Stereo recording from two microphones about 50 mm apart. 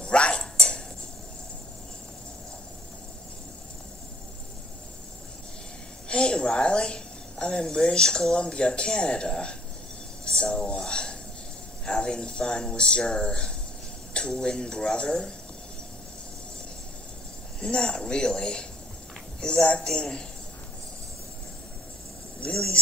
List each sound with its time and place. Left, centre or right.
0.0 s dog: left
6.0 s a woman's voice: centre
17.6 s speech: centre
22.4 s speech: centre